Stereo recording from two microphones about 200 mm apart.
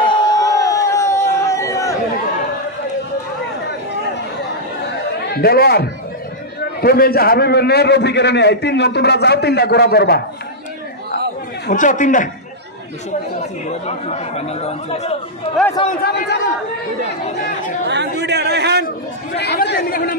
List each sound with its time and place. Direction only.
0.0 s a sound: 20° left (ahead or behind)
5.3 s a man's voice: 50° left (ahead or behind)
11.7 s speech: 40° left (ahead or behind)
13.4 s speech: 35° left (ahead or behind)
16.0 s a man's voice: 55° left (ahead or behind)
17.8 s a man's voice: 60° right (ahead or behind)
19.3 s speech: 55° left (ahead or behind)